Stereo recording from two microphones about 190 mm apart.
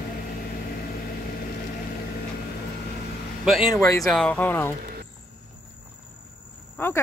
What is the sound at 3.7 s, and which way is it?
Speech, 15° left (ahead or behind).